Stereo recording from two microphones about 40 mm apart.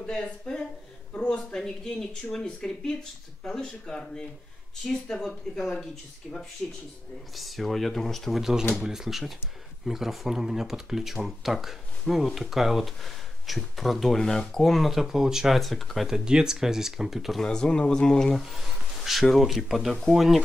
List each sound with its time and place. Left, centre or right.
0.0 s speech: left
1.5 s speech: centre
8.4 s speech: centre
14.2 s speech: centre
14.6 s speech: centre
14.9 s speech: centre
15.6 s speech: centre
16.1 s speech: centre
17.4 s speech: centre
18.3 s speech: centre